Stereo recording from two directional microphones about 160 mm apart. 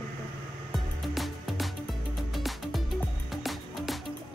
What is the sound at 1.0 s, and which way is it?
Music, centre (ahead or behind).